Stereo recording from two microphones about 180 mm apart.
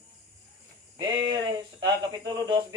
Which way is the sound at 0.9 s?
25° right (ahead or behind).